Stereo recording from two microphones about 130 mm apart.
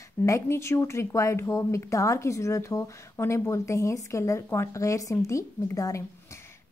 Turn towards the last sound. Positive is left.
turn(degrees=25)  # may be behind; listen again after turning